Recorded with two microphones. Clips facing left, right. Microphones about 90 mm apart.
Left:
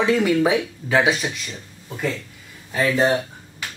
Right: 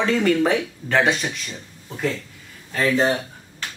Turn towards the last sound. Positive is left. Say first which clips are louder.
# even
turn(degrees=10)  # may be behind; listen again after turning